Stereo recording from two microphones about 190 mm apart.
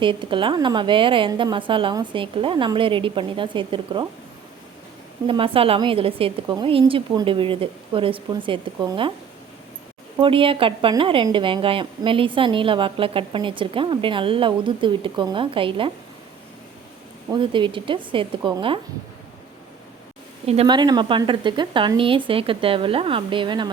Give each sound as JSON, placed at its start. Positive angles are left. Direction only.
{"t": 0.0, "sound": "a woman's voice", "side_deg": -25}
{"t": 5.2, "sound": "a woman's voice", "side_deg": -30}
{"t": 10.2, "sound": "a woman's voice", "side_deg": -30}
{"t": 17.3, "sound": "a woman's voice", "side_deg": -25}
{"t": 20.5, "sound": "a woman's voice", "side_deg": -30}